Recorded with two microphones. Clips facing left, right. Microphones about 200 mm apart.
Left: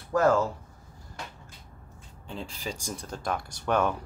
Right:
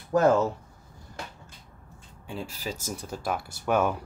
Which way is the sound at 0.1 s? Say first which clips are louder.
Right 2 dB; 20° right (ahead or behind).